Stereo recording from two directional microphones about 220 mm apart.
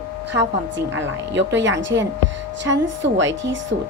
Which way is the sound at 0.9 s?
55° right (ahead or behind).